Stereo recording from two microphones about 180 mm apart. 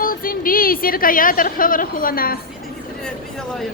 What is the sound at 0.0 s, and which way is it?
A woman's voice, 50° left (ahead or behind).